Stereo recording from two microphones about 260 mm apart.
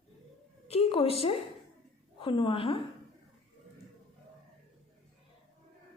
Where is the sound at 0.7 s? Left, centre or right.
Left.